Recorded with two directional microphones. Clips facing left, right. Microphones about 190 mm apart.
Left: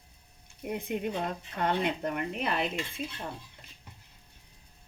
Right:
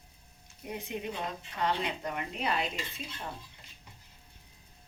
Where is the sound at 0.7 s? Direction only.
55° left (ahead or behind).